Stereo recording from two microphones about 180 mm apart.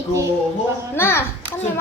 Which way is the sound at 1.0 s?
15° left (ahead or behind).